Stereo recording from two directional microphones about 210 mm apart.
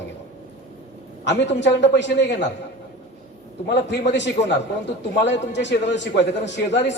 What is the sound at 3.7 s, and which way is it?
A man's voice, 55° left (ahead or behind).